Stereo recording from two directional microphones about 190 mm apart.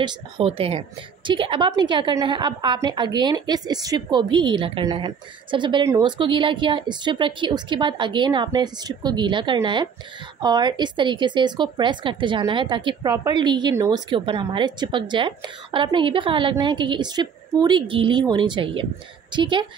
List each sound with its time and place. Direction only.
0.0 s a woman's voice: 30° right (ahead or behind)